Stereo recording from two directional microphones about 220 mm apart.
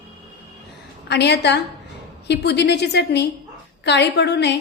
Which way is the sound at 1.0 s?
50° left (ahead or behind).